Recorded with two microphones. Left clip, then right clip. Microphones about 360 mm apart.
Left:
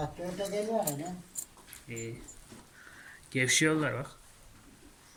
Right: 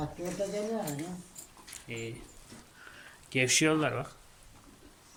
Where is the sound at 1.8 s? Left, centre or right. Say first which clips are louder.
Right 2 dB; centre.